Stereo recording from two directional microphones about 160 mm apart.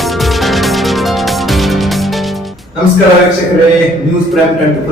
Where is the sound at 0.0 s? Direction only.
Centre (ahead or behind).